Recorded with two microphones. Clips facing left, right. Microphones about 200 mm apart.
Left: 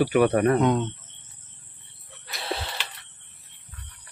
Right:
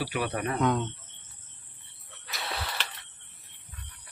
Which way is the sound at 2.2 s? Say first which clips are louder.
Left 5 dB; 30° left (ahead or behind).